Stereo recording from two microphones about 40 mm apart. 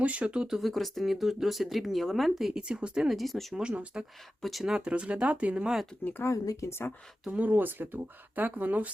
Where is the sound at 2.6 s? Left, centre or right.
Right.